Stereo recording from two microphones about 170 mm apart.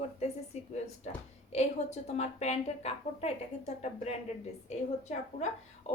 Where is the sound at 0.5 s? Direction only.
40° left (ahead or behind).